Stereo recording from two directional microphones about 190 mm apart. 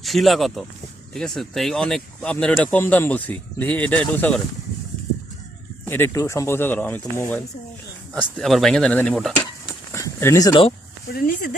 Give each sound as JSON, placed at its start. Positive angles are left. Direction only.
{"t": 0.0, "sound": "speech", "side_deg": 0}
{"t": 5.8, "sound": "speech", "side_deg": 10}
{"t": 9.9, "sound": "speech", "side_deg": 15}
{"t": 11.1, "sound": "speech", "side_deg": 50}